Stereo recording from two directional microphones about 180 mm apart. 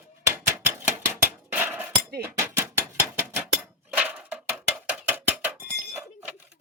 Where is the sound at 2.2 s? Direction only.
15° right (ahead or behind).